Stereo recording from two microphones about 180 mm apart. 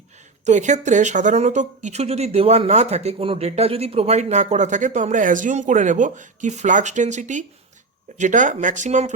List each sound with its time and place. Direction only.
0.4 s speech: 40° right (ahead or behind)